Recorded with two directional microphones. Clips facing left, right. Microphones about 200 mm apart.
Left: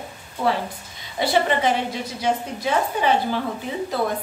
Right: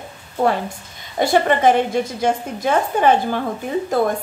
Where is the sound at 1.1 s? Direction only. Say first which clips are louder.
Right 4 dB; 50° right (ahead or behind).